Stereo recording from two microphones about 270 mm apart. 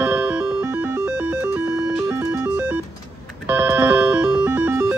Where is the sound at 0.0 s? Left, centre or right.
Centre.